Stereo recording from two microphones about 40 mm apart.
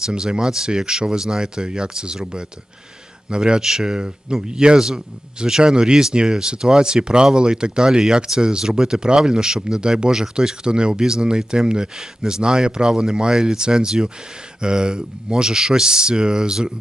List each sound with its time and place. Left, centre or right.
0.0 s speech: centre